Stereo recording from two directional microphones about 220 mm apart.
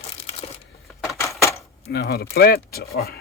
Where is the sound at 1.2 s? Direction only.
15° left (ahead or behind).